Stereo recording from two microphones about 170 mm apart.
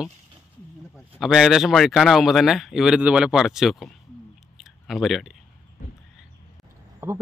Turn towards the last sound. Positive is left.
turn(degrees=-15)  # may be behind; listen again after turning